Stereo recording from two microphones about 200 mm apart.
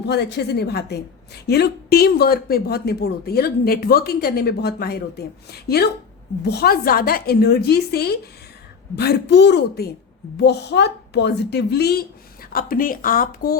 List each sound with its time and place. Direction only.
0.1 s a woman's voice: 55° left (ahead or behind)